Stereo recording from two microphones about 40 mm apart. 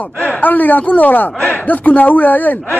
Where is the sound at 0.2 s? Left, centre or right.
Left.